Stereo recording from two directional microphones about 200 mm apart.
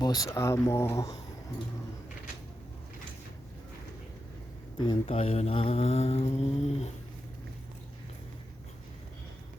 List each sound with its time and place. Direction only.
0.0 s speech: 20° left (ahead or behind)
4.8 s mantra: 25° left (ahead or behind)